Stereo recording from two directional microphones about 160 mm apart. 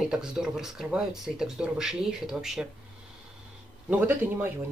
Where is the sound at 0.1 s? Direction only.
5° right (ahead or behind).